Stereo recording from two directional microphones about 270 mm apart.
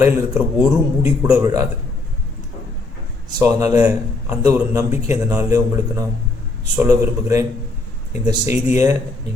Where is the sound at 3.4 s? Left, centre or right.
Centre.